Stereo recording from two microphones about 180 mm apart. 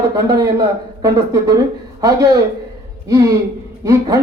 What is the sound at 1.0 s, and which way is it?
Speech, 20° right (ahead or behind).